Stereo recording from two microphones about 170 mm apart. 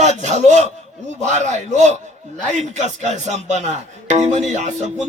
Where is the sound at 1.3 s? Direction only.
40° right (ahead or behind).